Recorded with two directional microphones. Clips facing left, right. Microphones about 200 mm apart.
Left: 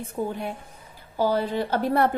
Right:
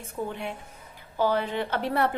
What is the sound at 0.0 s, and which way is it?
A woman's voice, 40° left (ahead or behind).